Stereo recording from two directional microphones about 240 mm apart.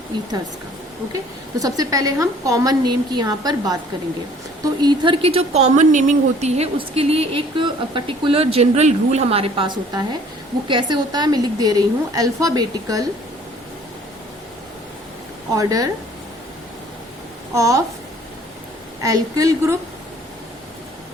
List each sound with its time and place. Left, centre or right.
1.1 s a woman's voice: centre
15.5 s a woman's voice: centre
17.5 s a woman's voice: centre
19.0 s a woman's voice: centre